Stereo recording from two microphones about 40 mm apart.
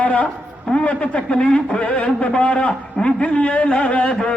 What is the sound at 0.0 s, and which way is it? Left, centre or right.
Speech, left.